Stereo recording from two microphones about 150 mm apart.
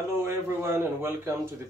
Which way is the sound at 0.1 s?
15° right (ahead or behind).